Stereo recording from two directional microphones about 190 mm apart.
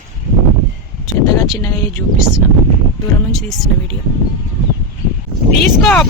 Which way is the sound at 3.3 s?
Centre (ahead or behind).